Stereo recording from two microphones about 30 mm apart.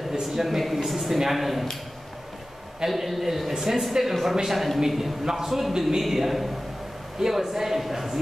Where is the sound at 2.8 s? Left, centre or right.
Centre.